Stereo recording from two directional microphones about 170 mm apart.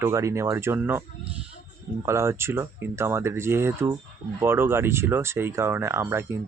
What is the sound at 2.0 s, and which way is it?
Speech, 15° right (ahead or behind).